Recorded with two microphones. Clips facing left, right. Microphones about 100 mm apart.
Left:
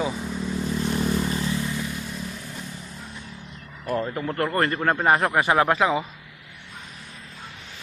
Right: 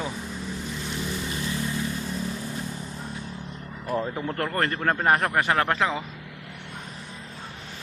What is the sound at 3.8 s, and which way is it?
A man's voice, centre (ahead or behind).